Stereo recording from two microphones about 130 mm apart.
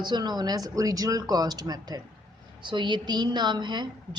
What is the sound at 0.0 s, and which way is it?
A woman's voice, 35° right (ahead or behind).